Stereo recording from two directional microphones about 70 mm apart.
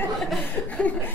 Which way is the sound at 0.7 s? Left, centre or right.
Centre.